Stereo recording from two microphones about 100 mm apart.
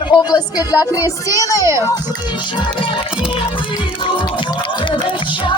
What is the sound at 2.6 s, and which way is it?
Music, 60° left (ahead or behind).